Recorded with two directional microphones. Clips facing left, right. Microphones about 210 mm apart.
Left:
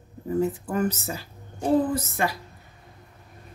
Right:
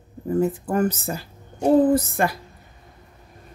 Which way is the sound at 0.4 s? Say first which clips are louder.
Right 4 dB; 50° right (ahead or behind).